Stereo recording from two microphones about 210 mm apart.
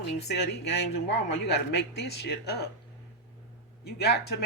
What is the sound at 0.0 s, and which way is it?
Speech, 50° left (ahead or behind).